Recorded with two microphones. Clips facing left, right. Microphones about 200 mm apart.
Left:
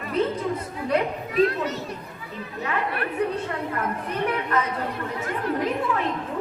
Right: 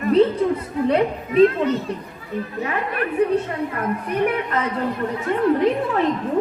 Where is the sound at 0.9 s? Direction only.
30° right (ahead or behind).